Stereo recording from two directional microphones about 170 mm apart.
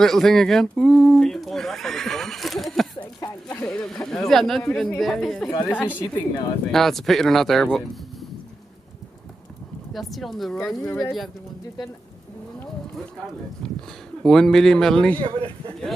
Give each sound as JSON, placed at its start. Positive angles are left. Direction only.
{"t": 0.0, "sound": "a woman's voice", "side_deg": 0}
{"t": 9.9, "sound": "speech", "side_deg": 0}
{"t": 14.2, "sound": "speech", "side_deg": 5}
{"t": 15.2, "sound": "speech", "side_deg": -30}